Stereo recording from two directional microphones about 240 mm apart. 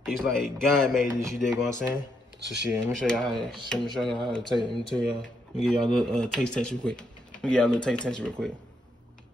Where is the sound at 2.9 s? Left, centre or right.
Centre.